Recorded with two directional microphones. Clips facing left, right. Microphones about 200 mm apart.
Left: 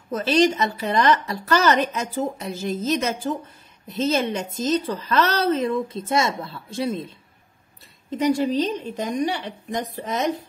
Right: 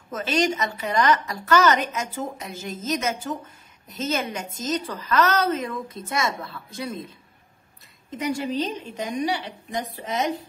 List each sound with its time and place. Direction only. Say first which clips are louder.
0.1 s a woman's voice: left 5 dB; 35° left (ahead or behind)
8.1 s a woman's voice: left 6 dB; 35° left (ahead or behind)